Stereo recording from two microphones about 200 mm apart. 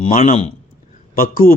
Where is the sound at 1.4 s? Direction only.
10° left (ahead or behind).